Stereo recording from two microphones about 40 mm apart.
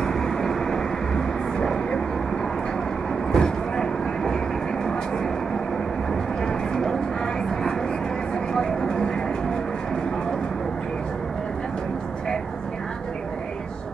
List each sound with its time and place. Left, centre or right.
0.0 s vehicle: centre
3.3 s train: centre
6.4 s vehicle: centre
8.5 s vehicle: left